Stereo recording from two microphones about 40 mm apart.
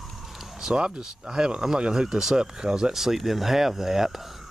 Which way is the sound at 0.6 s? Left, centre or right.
Centre.